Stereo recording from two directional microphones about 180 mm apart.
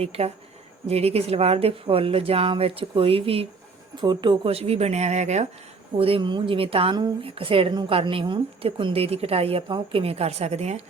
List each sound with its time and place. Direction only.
0.0 s speech: 35° right (ahead or behind)